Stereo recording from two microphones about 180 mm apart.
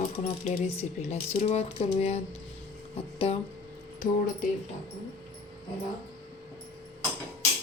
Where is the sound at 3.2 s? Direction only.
35° left (ahead or behind).